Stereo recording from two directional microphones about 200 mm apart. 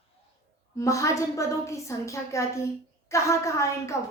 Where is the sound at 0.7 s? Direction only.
15° left (ahead or behind).